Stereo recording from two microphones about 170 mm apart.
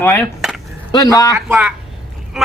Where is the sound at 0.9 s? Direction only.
20° left (ahead or behind).